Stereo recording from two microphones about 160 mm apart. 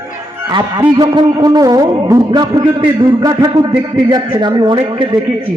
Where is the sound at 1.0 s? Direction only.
25° right (ahead or behind).